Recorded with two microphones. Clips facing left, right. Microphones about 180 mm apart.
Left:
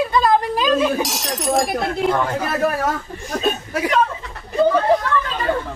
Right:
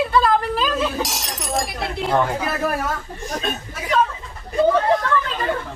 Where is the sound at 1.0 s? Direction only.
Centre (ahead or behind).